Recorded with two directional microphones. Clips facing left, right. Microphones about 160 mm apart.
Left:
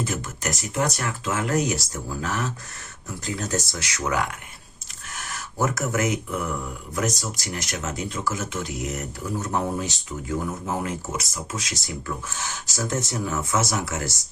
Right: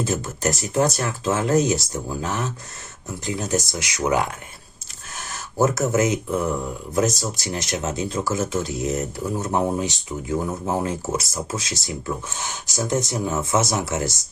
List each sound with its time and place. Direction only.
0.0 s speech: 30° right (ahead or behind)
10.8 s speech: 35° right (ahead or behind)